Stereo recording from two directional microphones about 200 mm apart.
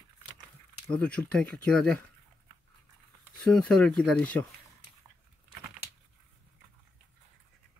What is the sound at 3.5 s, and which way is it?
Speech, 5° left (ahead or behind).